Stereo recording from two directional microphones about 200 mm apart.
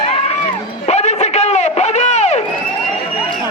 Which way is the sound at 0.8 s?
35° left (ahead or behind).